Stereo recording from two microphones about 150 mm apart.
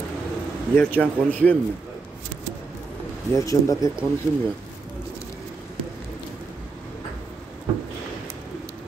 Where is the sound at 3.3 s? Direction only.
20° left (ahead or behind).